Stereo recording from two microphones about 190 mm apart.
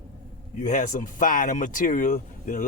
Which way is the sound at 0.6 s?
45° left (ahead or behind).